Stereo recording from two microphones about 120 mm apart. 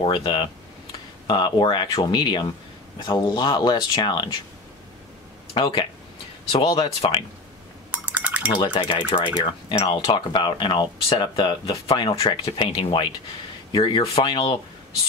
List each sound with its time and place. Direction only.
0.0 s speech: 50° left (ahead or behind)
5.5 s speech: 45° left (ahead or behind)
7.9 s a sound: 15° right (ahead or behind)
8.6 s speech: 40° left (ahead or behind)